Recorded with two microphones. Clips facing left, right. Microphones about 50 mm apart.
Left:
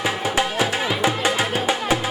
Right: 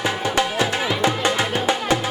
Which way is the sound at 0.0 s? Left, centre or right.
Centre.